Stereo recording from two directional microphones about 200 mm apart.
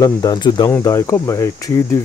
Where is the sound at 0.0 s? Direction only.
20° left (ahead or behind).